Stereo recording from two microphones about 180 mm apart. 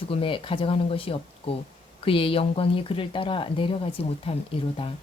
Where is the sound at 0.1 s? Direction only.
30° left (ahead or behind).